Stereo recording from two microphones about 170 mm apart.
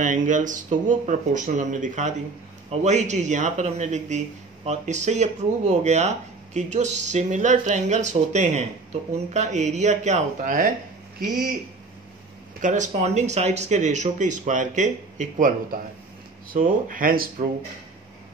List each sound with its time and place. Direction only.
0.0 s a man's voice: 50° right (ahead or behind)
12.6 s speech: 45° right (ahead or behind)